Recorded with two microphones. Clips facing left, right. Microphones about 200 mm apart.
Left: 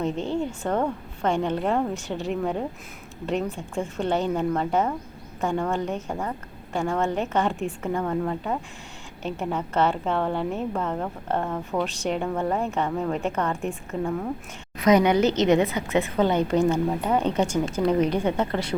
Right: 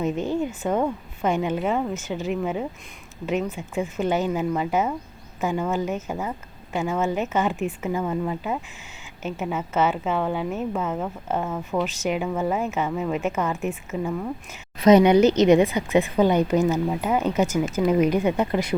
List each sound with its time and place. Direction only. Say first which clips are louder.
0.0 s a woman's voice: right 2 dB; 5° right (ahead or behind)
14.8 s a woman's voice: right 4 dB; 25° right (ahead or behind); by 18.8 s 10° right (ahead or behind)